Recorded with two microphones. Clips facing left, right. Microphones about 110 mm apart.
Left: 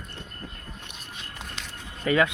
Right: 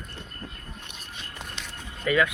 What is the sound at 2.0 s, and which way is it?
Speech, 30° left (ahead or behind).